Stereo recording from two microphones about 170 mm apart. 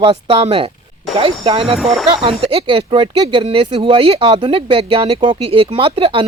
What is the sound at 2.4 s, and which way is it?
Speech, 35° right (ahead or behind).